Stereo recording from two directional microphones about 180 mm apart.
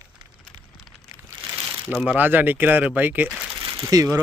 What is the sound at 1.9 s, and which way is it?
Speech, 5° right (ahead or behind).